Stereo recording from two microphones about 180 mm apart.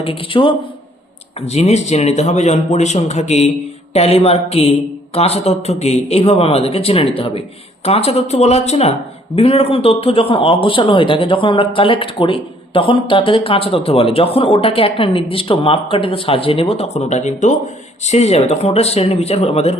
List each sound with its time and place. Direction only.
0.0 s a man's voice: 30° left (ahead or behind)